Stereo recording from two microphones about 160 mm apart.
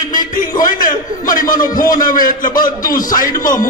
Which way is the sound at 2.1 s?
60° left (ahead or behind).